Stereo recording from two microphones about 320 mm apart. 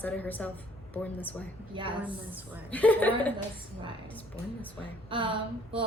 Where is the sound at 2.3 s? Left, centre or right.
Centre.